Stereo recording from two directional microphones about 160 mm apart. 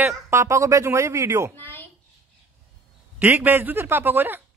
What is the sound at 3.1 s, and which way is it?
A man's voice, 10° right (ahead or behind).